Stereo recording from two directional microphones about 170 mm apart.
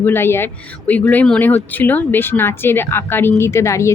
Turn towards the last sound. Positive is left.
turn(degrees=15)  # may be behind; listen again after turning